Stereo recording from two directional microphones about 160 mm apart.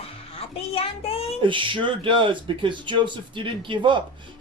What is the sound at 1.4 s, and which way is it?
Speech, 30° right (ahead or behind).